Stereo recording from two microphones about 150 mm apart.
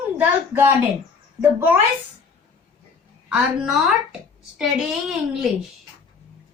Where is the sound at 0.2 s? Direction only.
10° right (ahead or behind).